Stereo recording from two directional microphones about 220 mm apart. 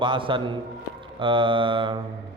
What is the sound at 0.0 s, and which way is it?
A man's voice, 20° right (ahead or behind).